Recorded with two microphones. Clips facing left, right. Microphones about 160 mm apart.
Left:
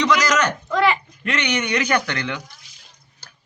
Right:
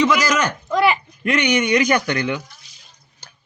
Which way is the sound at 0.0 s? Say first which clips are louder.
Right 1 dB; 10° right (ahead or behind).